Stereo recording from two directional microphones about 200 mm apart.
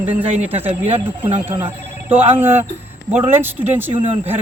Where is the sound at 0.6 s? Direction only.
10° right (ahead or behind).